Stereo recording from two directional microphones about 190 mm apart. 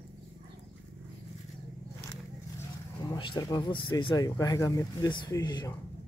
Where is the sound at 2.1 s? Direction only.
15° left (ahead or behind).